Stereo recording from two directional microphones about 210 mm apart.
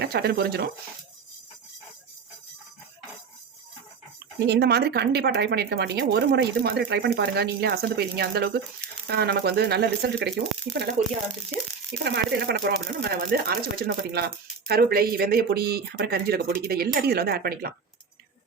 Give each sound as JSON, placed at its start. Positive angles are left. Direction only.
{"t": 0.0, "sound": "speech", "side_deg": -50}
{"t": 4.4, "sound": "speech", "side_deg": -50}
{"t": 12.0, "sound": "speech", "side_deg": -50}